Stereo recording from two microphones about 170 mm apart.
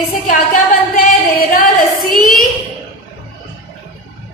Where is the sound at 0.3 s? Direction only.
55° left (ahead or behind).